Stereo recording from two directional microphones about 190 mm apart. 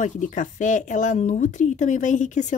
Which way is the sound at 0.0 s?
40° left (ahead or behind).